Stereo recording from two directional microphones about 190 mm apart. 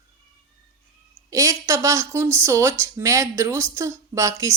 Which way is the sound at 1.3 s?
15° right (ahead or behind).